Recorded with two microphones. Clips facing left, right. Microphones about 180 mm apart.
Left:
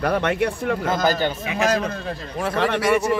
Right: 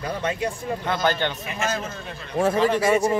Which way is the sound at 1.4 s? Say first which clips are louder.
Left 6 dB; 70° left (ahead or behind).